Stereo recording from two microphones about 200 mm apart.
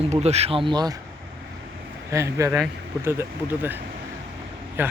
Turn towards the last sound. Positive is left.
turn(degrees=-10)  # may be behind; listen again after turning